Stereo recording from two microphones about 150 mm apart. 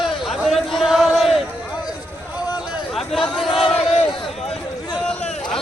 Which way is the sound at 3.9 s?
40° left (ahead or behind).